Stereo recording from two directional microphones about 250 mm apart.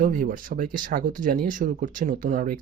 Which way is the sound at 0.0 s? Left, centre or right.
Right.